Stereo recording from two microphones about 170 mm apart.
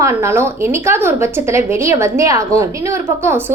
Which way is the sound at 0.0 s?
15° right (ahead or behind).